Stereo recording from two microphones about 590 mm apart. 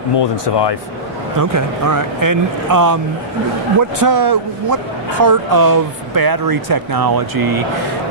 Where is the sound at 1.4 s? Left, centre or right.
Right.